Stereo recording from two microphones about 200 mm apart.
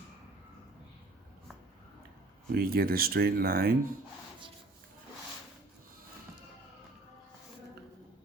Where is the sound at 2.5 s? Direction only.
50° right (ahead or behind).